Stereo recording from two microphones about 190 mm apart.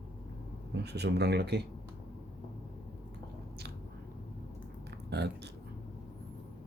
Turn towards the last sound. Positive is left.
turn(degrees=-60)  # may be behind; listen again after turning